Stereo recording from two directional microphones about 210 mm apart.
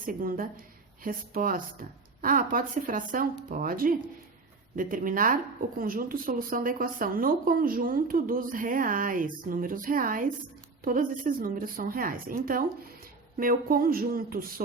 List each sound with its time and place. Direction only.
0.0 s a woman's voice: 40° right (ahead or behind)